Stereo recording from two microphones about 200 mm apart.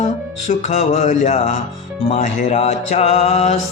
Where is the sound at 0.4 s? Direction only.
30° left (ahead or behind).